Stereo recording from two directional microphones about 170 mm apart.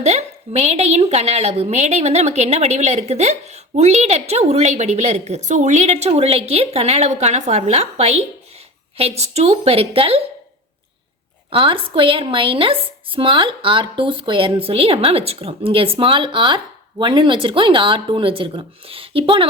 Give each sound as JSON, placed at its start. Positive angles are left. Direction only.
{"t": 0.0, "sound": "a woman's voice", "side_deg": -40}
{"t": 11.5, "sound": "a woman's voice", "side_deg": -30}